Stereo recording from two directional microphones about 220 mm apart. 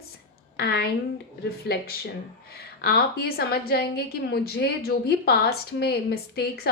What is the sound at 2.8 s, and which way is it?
A woman's voice, 45° left (ahead or behind).